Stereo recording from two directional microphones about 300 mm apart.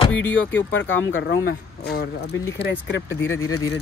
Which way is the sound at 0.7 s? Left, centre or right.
Left.